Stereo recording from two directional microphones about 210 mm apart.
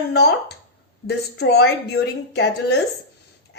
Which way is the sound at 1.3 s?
50° left (ahead or behind).